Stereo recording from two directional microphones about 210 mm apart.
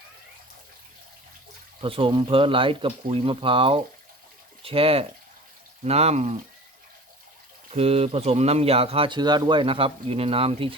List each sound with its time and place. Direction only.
1.8 s speech: 25° right (ahead or behind)
7.7 s speech: 30° right (ahead or behind)